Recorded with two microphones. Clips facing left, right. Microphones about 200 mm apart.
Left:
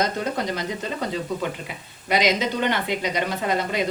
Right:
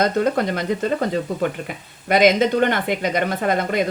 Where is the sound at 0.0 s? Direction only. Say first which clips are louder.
Right 6 dB; 55° right (ahead or behind).